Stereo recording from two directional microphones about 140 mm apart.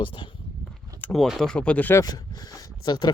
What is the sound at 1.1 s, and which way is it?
Speech, centre (ahead or behind).